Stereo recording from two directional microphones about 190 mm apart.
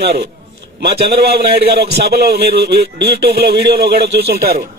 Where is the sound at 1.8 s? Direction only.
60° right (ahead or behind).